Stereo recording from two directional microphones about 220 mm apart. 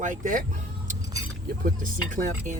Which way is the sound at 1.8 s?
35° right (ahead or behind).